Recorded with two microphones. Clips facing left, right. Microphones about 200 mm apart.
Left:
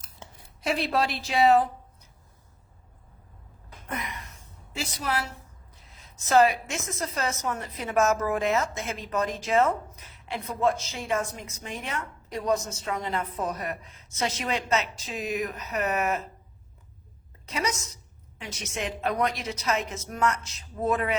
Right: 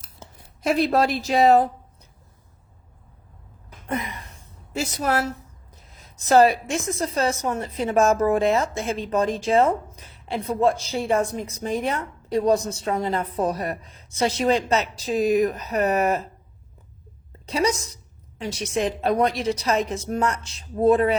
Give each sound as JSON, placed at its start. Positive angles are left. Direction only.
{"t": 0.6, "sound": "a woman's voice", "side_deg": -45}
{"t": 3.8, "sound": "a sound", "side_deg": -30}
{"t": 4.7, "sound": "a woman's voice", "side_deg": -45}
{"t": 17.4, "sound": "a woman's voice", "side_deg": -30}